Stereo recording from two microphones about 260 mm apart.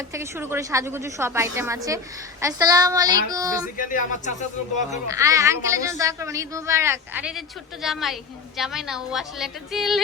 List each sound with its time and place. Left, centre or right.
0.1 s a woman's voice: centre
3.8 s speech: left
5.1 s a woman's voice: centre